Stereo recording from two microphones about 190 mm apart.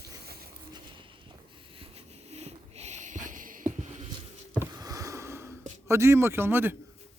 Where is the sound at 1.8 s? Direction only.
35° right (ahead or behind).